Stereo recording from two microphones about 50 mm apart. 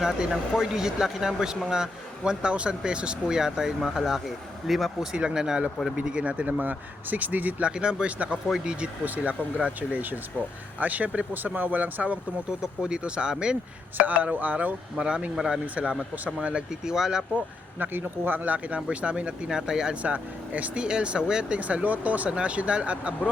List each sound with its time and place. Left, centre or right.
0.0 s speech: centre
5.1 s speech: centre; by 7.5 s right
7.6 s speech: centre
9.0 s speech: right
12.5 s speech: centre
13.9 s speech: right
14.9 s speech: centre
16.2 s speech: right
16.8 s speech: centre
17.7 s speech: right; by 20.0 s centre
20.0 s speech: right
21.6 s speech: right